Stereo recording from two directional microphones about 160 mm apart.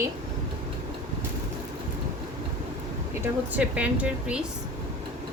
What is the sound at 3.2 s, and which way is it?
Speech, 10° right (ahead or behind).